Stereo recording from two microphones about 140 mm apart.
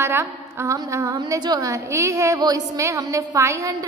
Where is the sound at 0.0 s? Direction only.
20° right (ahead or behind).